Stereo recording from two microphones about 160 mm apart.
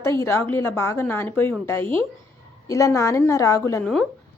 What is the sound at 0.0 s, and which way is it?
A woman's voice, 15° left (ahead or behind).